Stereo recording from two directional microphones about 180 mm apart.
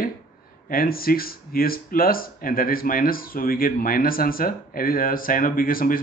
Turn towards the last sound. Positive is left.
turn(degrees=50)  # may be behind; listen again after turning